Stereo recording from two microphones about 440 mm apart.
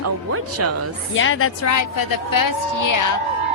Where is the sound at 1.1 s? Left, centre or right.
Left.